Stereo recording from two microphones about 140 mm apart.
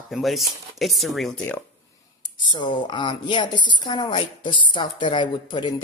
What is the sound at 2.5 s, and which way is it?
A woman's voice, 35° left (ahead or behind).